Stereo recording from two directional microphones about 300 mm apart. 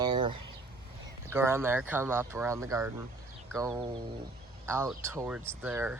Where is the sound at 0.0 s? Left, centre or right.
Centre.